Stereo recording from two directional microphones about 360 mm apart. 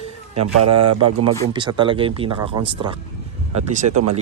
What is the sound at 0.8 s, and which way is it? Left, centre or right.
Speech, right.